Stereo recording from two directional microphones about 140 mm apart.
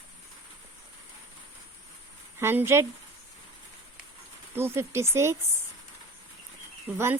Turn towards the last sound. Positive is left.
turn(degrees=-10)  # may be behind; listen again after turning